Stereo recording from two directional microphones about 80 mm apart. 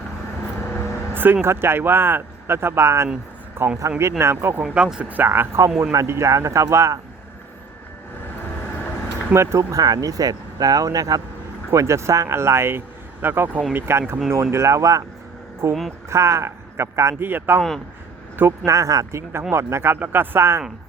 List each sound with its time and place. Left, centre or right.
1.1 s speech: right
4.6 s speech: centre; by 7.0 s right
9.3 s speech: right
19.3 s speech: right